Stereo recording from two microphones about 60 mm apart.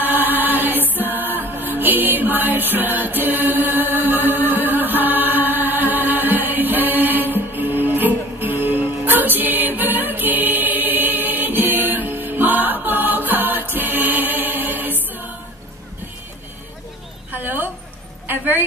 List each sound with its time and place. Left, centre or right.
0.0 s chant: right
0.9 s music: right
17.3 s a sound: right